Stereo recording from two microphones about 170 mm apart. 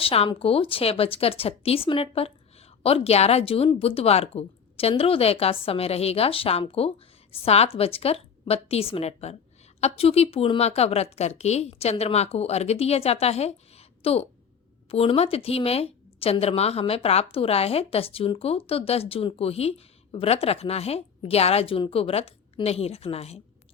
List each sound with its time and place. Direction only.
0.0 s speech: 35° left (ahead or behind)